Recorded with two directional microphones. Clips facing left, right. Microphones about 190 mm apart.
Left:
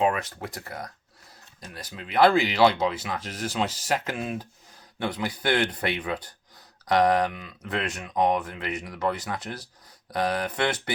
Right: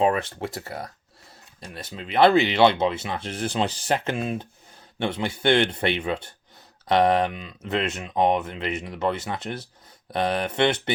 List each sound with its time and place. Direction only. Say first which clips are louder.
0.0 s speech: right 3 dB; 30° right (ahead or behind)